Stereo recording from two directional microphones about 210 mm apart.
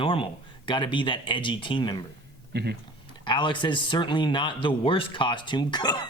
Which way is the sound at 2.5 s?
50° right (ahead or behind).